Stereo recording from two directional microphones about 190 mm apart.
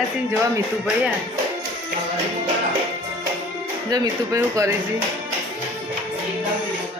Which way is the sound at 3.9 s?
15° right (ahead or behind).